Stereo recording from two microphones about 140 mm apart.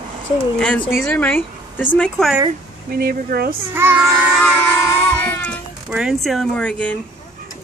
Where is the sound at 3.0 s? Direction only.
90° right.